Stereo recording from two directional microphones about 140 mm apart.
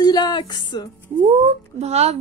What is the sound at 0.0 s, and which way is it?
Speech, 30° left (ahead or behind).